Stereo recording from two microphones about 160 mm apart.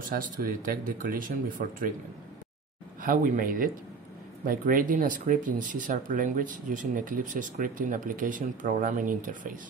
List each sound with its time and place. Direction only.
0.1 s speech: 65° right (ahead or behind)
3.0 s speech: 60° right (ahead or behind)